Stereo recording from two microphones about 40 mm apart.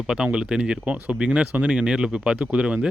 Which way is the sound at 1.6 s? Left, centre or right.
Right.